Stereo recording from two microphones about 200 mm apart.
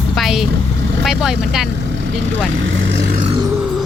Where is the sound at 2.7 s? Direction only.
70° right (ahead or behind).